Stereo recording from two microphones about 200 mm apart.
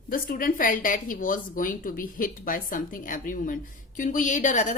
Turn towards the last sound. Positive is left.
turn(degrees=40)  # may be behind; listen again after turning